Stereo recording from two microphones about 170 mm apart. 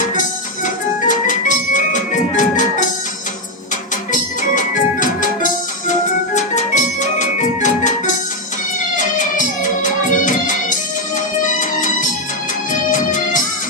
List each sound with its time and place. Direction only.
0.0 s music: 50° left (ahead or behind)
4.1 s organ: 50° left (ahead or behind)
5.9 s music: 45° left (ahead or behind)